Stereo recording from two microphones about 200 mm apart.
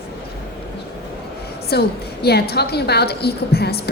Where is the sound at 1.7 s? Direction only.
55° left (ahead or behind).